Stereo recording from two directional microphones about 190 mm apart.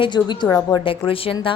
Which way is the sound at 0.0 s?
25° left (ahead or behind).